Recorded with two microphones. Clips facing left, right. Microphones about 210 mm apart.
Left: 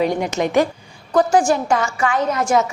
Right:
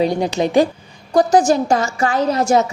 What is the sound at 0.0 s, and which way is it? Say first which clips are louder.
A woman's voice: right 2 dB; 35° right (ahead or behind).